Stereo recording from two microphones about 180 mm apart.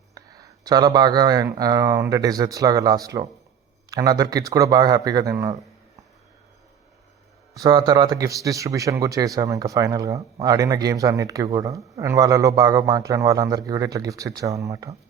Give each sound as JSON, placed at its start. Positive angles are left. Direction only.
{"t": 0.1, "sound": "a man's voice", "side_deg": -20}
{"t": 7.5, "sound": "a man's voice", "side_deg": -20}